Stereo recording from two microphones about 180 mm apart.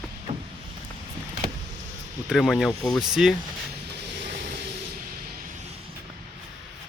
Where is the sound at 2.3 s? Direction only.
Centre (ahead or behind).